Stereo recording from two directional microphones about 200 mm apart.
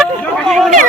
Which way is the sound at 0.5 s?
Centre (ahead or behind).